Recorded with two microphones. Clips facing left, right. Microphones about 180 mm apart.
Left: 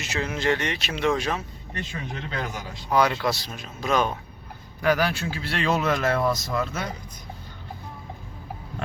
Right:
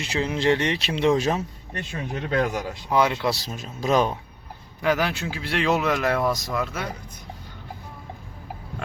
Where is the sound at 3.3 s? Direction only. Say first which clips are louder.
Right 3 dB; 40° right (ahead or behind).